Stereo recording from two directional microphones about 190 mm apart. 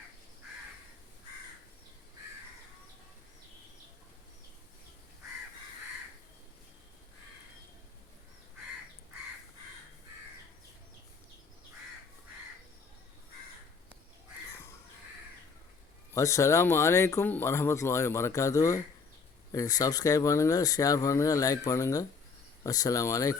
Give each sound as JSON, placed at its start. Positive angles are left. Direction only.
{"t": 16.1, "sound": "speech", "side_deg": 15}